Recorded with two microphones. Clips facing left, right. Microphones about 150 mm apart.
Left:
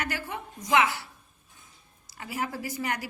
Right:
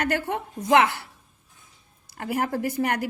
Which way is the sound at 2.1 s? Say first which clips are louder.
Right 7 dB; 55° right (ahead or behind).